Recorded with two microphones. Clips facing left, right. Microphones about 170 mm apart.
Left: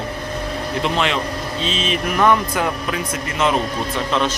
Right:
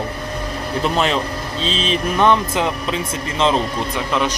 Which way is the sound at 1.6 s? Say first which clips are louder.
Right 2 dB; 30° right (ahead or behind).